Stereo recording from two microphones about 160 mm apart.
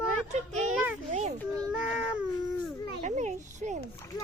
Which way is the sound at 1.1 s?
45° right (ahead or behind).